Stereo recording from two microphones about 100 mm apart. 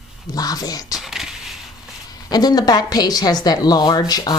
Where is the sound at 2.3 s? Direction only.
40° left (ahead or behind).